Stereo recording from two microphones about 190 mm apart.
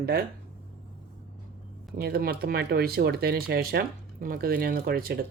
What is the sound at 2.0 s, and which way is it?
Speech, 55° right (ahead or behind).